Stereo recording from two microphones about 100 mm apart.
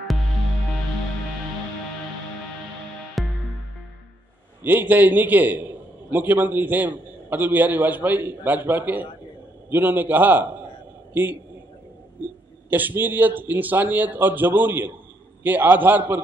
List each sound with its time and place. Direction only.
3.2 s music: centre (ahead or behind)
4.6 s a man's voice: 15° right (ahead or behind)
12.6 s a man's voice: 20° right (ahead or behind)